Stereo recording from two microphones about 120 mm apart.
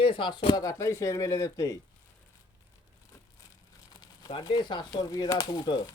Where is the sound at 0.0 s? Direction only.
45° left (ahead or behind); by 1.8 s 25° left (ahead or behind).